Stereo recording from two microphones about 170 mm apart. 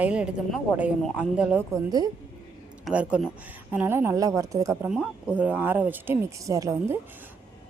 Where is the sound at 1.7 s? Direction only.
20° right (ahead or behind).